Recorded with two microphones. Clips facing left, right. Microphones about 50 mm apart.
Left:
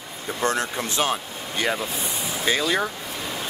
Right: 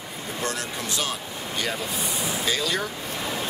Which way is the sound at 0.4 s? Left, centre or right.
Left.